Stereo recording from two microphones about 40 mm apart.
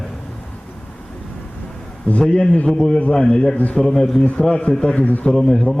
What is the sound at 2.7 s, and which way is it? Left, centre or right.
Speech, centre.